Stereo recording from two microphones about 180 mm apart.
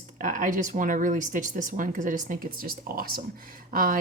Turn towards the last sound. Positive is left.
turn(degrees=-55)  # may be behind; listen again after turning